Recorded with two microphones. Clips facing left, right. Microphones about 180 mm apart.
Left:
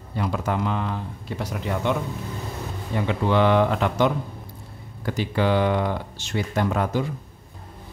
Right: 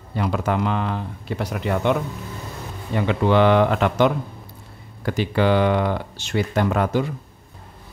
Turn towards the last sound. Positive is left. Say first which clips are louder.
# right 3 dB
turn(degrees=-70)  # may be behind; listen again after turning